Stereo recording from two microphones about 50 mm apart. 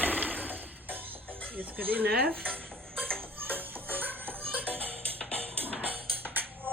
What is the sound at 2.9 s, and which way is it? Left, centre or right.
Music, centre.